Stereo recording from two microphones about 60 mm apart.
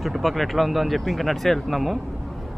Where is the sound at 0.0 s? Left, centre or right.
Centre.